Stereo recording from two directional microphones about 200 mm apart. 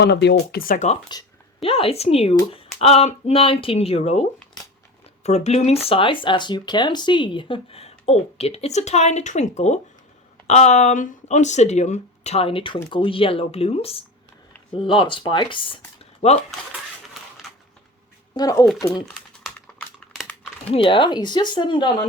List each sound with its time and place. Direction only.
0.0 s speech: 60° left (ahead or behind); by 0.9 s 40° left (ahead or behind)
1.6 s speech: 30° left (ahead or behind)
17.2 s a sound: centre (ahead or behind)
18.3 s speech: 15° left (ahead or behind)
19.0 s typing: 5° left (ahead or behind)
20.1 s crumpling: centre (ahead or behind)
20.7 s speech: 25° left (ahead or behind)